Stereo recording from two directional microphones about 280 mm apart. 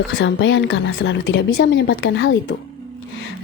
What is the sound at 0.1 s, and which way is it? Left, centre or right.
A woman's voice, left.